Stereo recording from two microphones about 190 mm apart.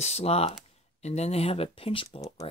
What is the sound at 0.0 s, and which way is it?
Speech, 35° left (ahead or behind).